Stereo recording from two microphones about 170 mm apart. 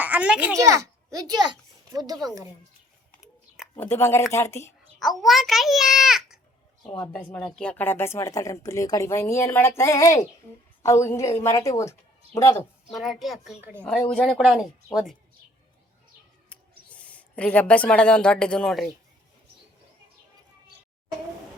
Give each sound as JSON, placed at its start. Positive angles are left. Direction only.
{"t": 0.0, "sound": "a sound", "side_deg": -10}
{"t": 0.5, "sound": "a child's voice", "side_deg": -20}
{"t": 3.8, "sound": "speech", "side_deg": 15}
{"t": 4.9, "sound": "a child's voice", "side_deg": 0}
{"t": 12.9, "sound": "a child's voice", "side_deg": 0}
{"t": 16.5, "sound": "speech", "side_deg": 10}